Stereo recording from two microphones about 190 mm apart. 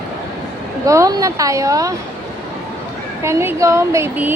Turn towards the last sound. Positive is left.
turn(degrees=-10)  # may be behind; listen again after turning